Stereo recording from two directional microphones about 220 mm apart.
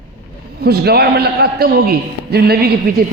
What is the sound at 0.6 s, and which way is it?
A man's voice, 45° right (ahead or behind).